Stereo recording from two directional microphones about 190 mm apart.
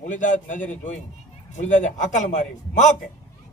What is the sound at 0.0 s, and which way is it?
Speech, 40° left (ahead or behind).